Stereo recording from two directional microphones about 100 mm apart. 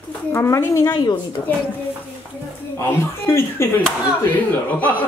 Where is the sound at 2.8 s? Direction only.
25° left (ahead or behind).